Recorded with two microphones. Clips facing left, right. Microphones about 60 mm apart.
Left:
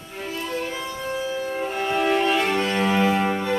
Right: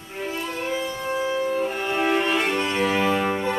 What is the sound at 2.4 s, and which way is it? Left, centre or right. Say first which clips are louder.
Cello: left 1 dB; centre.